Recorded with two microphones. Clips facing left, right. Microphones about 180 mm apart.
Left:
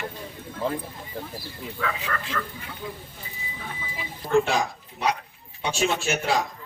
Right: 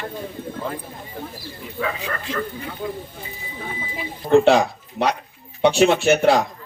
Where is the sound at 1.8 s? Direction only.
20° right (ahead or behind).